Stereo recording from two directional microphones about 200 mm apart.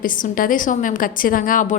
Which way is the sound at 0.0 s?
45° left (ahead or behind).